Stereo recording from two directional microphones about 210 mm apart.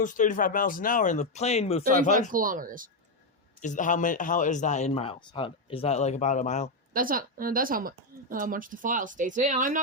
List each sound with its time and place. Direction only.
0.0 s a man's voice: 40° left (ahead or behind)
2.3 s speech: 40° right (ahead or behind)
3.6 s a man's voice: 35° left (ahead or behind)
6.9 s speech: 40° right (ahead or behind)